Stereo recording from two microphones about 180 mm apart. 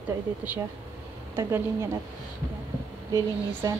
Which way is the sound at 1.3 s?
15° right (ahead or behind).